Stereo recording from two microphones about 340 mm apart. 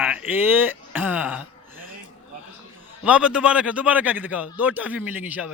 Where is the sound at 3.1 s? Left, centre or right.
Centre.